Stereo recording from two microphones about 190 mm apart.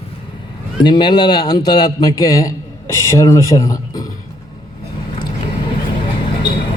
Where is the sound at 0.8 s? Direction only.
25° left (ahead or behind).